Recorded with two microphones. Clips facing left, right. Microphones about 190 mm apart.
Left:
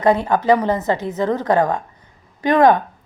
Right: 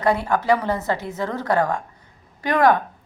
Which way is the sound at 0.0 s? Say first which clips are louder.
Left 4 dB; 20° left (ahead or behind).